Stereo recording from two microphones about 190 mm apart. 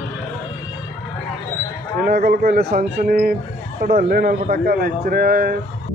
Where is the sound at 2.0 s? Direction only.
50° right (ahead or behind).